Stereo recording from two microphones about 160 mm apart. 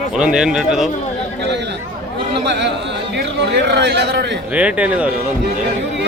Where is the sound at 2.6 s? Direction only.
90° right.